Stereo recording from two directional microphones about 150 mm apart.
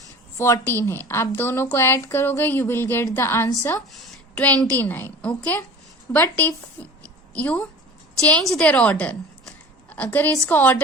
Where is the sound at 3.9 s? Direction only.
5° left (ahead or behind).